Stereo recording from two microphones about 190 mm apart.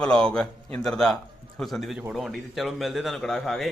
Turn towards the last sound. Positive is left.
turn(degrees=0)  # may be behind; listen again after turning